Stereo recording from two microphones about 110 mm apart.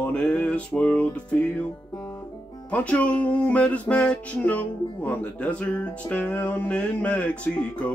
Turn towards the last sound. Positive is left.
turn(degrees=10)  # may be behind; listen again after turning